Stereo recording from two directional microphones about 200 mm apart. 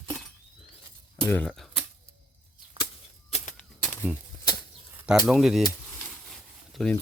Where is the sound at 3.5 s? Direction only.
5° left (ahead or behind).